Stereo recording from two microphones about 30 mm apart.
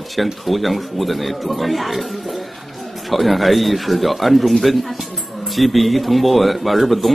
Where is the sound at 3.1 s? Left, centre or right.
Centre.